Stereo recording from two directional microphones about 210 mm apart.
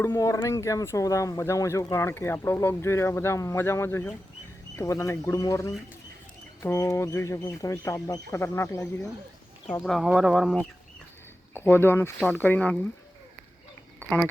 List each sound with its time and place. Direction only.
0.0 s speech: 15° left (ahead or behind); by 10.7 s centre (ahead or behind)
11.5 s speech: 10° left (ahead or behind)
14.0 s speech: 10° left (ahead or behind)